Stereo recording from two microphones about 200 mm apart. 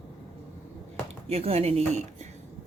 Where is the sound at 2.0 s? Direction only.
35° right (ahead or behind).